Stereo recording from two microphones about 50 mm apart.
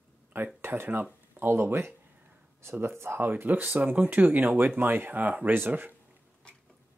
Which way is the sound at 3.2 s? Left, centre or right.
Right.